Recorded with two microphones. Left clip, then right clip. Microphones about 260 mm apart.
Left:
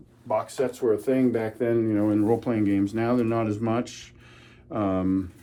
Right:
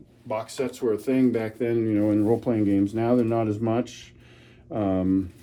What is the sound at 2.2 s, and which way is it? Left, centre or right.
Speech, left.